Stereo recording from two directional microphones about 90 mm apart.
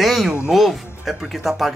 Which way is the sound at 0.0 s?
Centre (ahead or behind).